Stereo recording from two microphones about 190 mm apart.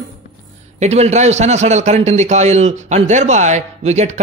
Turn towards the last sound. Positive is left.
turn(degrees=-35)  # may be behind; listen again after turning